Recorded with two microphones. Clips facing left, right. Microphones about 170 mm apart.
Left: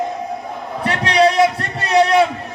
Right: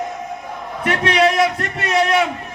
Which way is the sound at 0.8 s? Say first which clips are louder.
Left 1 dB; 30° left (ahead or behind).